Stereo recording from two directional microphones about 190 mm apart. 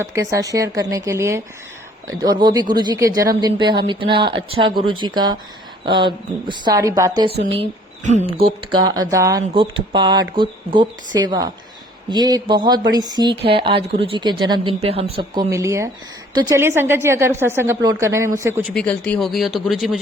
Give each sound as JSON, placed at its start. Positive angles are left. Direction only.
{"t": 0.1, "sound": "a woman's voice", "side_deg": -15}
{"t": 7.6, "sound": "a woman's voice", "side_deg": -35}
{"t": 18.7, "sound": "speech", "side_deg": 5}